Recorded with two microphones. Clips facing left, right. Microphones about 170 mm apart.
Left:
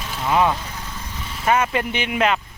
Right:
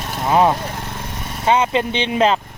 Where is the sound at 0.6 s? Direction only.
60° right (ahead or behind).